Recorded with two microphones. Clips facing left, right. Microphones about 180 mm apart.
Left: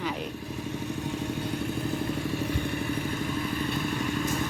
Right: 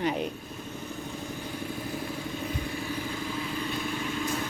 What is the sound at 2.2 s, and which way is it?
Vehicle, 70° left (ahead or behind).